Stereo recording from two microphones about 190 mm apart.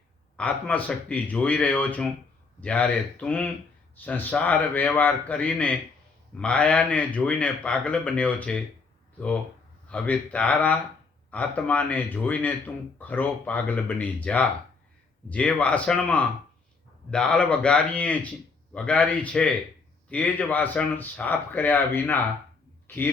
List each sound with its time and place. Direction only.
0.3 s speech: 5° left (ahead or behind)
9.9 s speech: 5° left (ahead or behind)